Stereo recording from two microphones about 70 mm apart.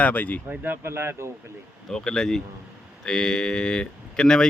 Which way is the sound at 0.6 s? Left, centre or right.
Right.